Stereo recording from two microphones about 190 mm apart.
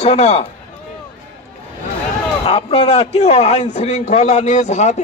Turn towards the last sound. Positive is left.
turn(degrees=35)  # may be behind; listen again after turning